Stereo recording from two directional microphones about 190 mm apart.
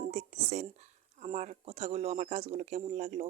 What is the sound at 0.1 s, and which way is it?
Speech, 35° right (ahead or behind).